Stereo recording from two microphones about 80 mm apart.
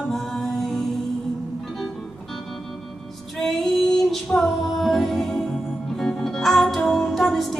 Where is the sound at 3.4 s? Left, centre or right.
Centre.